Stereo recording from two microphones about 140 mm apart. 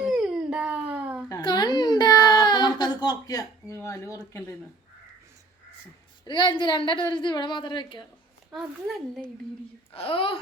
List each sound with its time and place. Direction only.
0.0 s a sound: 5° right (ahead or behind)
1.4 s baby cry: 30° left (ahead or behind)
6.2 s a woman's voice: 35° left (ahead or behind)
8.4 s speech: 5° right (ahead or behind)
9.9 s a woman's voice: 40° left (ahead or behind)